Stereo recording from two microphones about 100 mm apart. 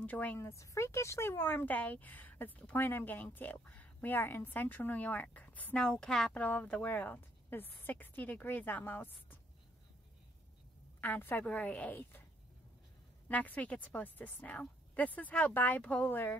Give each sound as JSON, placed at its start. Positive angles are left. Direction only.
{"t": 0.0, "sound": "speech", "side_deg": 15}
{"t": 0.4, "sound": "speech", "side_deg": 30}
{"t": 11.0, "sound": "a woman's voice", "side_deg": 20}
{"t": 13.3, "sound": "speech", "side_deg": 15}